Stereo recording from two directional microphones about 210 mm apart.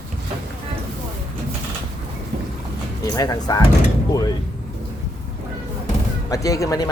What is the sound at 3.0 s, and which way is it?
Speech, 15° left (ahead or behind).